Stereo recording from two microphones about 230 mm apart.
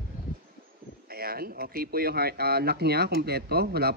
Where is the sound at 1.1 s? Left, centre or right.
Right.